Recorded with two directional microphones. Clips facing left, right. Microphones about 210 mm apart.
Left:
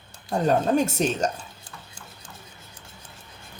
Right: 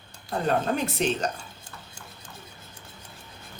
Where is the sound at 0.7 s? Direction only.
45° left (ahead or behind).